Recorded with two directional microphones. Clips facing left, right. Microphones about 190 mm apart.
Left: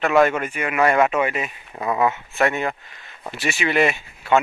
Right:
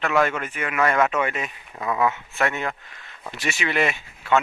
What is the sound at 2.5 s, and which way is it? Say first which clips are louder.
Speech: left 4 dB; 15° left (ahead or behind).